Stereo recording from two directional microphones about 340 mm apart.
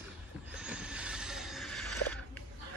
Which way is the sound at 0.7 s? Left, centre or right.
Centre.